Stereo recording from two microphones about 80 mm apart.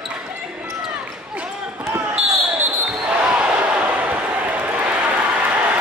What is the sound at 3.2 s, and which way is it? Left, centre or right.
Basketball bounce, centre.